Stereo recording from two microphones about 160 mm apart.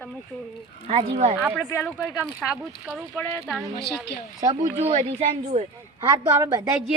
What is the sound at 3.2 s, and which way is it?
Speech, 15° left (ahead or behind).